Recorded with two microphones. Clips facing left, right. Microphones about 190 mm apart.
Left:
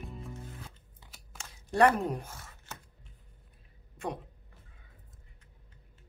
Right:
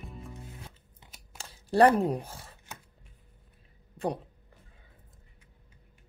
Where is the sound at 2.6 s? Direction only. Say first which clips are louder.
Even; 15° right (ahead or behind).